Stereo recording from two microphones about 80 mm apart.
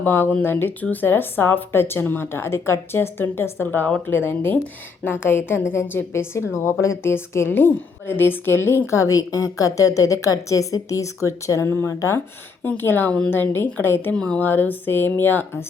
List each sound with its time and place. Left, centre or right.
0.0 s a woman's voice: left
14.1 s speech: centre
14.4 s a woman's voice: left